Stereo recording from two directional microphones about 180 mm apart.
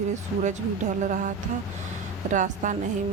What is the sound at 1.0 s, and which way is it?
Speech, 45° right (ahead or behind).